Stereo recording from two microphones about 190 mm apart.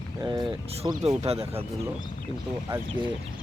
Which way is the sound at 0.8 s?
30° right (ahead or behind).